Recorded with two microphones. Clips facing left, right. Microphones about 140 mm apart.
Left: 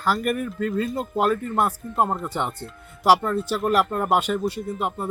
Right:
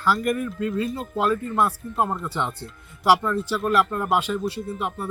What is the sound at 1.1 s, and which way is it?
Speech, 45° left (ahead or behind).